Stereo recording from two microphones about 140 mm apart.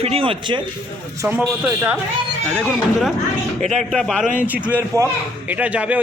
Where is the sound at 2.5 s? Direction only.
Centre (ahead or behind).